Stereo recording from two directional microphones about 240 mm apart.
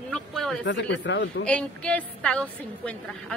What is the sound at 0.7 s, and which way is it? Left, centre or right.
Speech, left.